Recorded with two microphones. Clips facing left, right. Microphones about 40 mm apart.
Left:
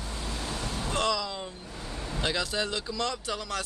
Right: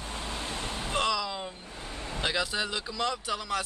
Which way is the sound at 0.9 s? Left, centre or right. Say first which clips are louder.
Even; centre.